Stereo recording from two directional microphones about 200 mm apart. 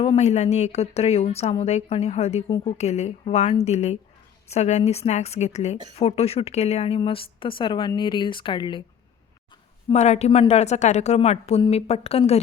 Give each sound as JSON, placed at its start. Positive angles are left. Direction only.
{"t": 0.0, "sound": "speech", "side_deg": 30}
{"t": 9.9, "sound": "speech", "side_deg": 35}